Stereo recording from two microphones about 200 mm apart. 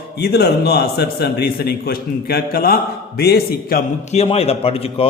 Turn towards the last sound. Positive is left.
turn(degrees=30)  # may be behind; listen again after turning